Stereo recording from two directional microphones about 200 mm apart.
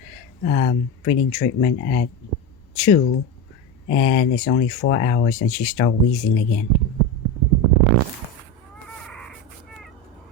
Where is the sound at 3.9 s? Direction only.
45° left (ahead or behind).